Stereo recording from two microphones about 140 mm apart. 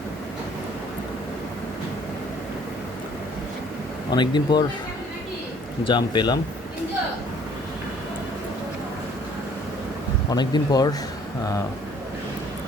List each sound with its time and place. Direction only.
4.1 s speech: 30° left (ahead or behind)
5.8 s speech: 35° left (ahead or behind)
10.2 s speech: 30° left (ahead or behind)